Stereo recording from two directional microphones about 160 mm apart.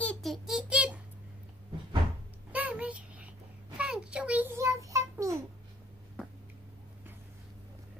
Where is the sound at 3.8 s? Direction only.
5° right (ahead or behind).